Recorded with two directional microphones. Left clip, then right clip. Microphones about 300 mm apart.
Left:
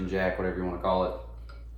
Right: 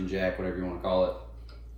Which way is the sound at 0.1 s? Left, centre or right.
Centre.